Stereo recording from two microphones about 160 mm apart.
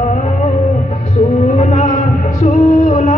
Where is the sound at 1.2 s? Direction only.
45° left (ahead or behind).